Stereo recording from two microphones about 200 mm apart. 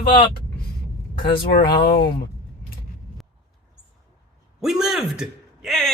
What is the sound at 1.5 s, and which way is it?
Speech, 45° left (ahead or behind).